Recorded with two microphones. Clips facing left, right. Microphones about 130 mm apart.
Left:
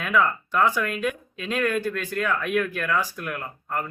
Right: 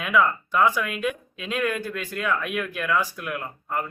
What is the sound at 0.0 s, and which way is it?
Speech, 5° right (ahead or behind).